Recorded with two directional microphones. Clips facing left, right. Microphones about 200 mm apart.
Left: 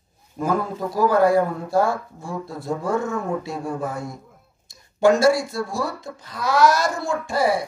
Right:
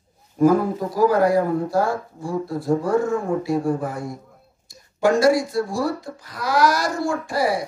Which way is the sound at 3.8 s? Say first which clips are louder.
Right 1 dB; 25° left (ahead or behind).